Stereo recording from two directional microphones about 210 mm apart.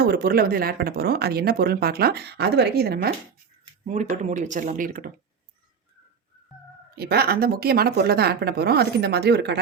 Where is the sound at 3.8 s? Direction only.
35° right (ahead or behind).